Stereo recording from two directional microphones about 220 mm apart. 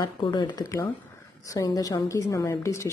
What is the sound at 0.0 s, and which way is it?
A woman's voice, 20° left (ahead or behind).